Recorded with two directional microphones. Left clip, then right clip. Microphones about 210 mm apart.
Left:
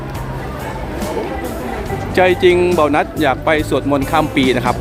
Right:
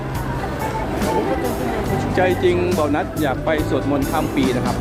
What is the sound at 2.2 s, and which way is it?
Speech, 25° left (ahead or behind).